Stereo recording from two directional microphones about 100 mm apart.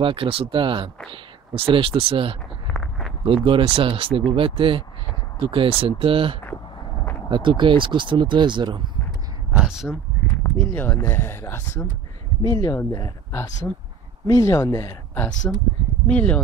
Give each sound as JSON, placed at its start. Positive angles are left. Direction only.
{"t": 0.0, "sound": "speech", "side_deg": -65}
{"t": 2.7, "sound": "a sound", "side_deg": 5}
{"t": 3.3, "sound": "speech", "side_deg": -60}
{"t": 9.5, "sound": "a sound", "side_deg": -10}
{"t": 10.6, "sound": "speech", "side_deg": 20}
{"t": 16.1, "sound": "speech", "side_deg": 10}